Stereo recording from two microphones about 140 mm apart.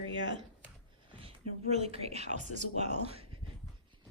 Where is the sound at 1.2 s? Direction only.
45° right (ahead or behind).